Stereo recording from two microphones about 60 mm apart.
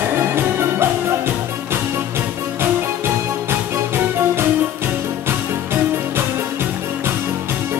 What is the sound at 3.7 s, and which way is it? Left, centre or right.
Music, right.